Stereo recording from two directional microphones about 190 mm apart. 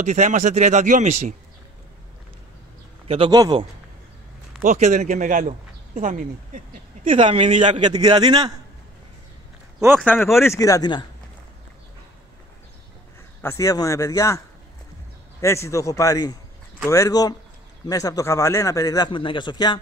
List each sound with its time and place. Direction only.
0.0 s speech: 40° right (ahead or behind)
3.1 s speech: 25° right (ahead or behind)
4.6 s speech: 40° right (ahead or behind)
7.8 s speech: 20° right (ahead or behind)
9.9 s speech: 5° left (ahead or behind)
10.4 s speech: 15° left (ahead or behind)
13.4 s speech: 15° left (ahead or behind)
15.4 s a man's voice: 15° left (ahead or behind)